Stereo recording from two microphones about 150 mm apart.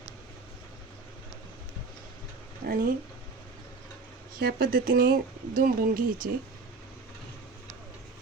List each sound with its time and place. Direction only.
2.6 s speech: 75° right (ahead or behind)
4.4 s speech: 90° right; by 6.3 s 70° right (ahead or behind)